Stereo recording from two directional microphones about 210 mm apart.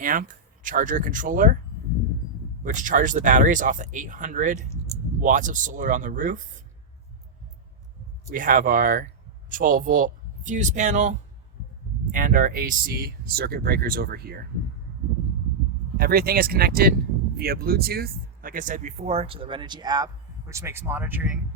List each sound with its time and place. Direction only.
0.0 s speech: 40° right (ahead or behind)
2.6 s speech: 40° right (ahead or behind)
8.3 s speech: 40° right (ahead or behind)
16.0 s speech: 45° right (ahead or behind); by 21.3 s 10° right (ahead or behind)